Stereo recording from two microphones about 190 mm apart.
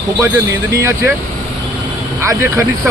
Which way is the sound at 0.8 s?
15° right (ahead or behind).